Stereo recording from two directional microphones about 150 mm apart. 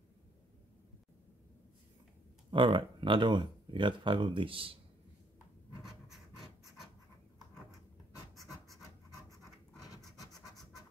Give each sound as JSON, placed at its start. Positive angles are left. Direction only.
{"t": 2.5, "sound": "speech", "side_deg": -35}
{"t": 8.4, "sound": "pant", "side_deg": 0}
{"t": 9.8, "sound": "scratch", "side_deg": 25}